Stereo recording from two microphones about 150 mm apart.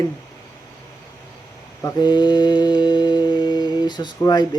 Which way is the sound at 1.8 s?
25° left (ahead or behind).